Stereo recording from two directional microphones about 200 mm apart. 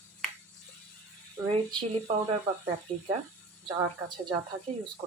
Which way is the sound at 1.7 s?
25° right (ahead or behind).